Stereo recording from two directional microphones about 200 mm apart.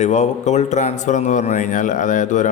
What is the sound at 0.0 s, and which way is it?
Speech, 35° left (ahead or behind).